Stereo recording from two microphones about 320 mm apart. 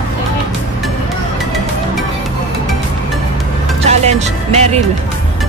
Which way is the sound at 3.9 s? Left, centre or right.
Right.